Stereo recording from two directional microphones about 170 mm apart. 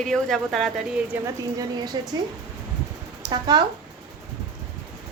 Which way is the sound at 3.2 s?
25° right (ahead or behind).